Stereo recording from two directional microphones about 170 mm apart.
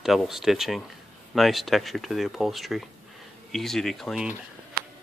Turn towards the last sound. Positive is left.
turn(degrees=-65)  # may be behind; listen again after turning